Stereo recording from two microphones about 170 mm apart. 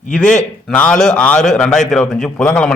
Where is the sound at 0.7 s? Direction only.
5° left (ahead or behind).